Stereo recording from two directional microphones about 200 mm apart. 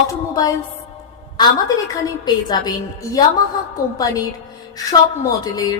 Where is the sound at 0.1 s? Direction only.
15° left (ahead or behind).